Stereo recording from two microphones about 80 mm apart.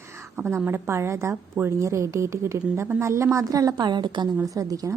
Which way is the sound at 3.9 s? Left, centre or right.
Right.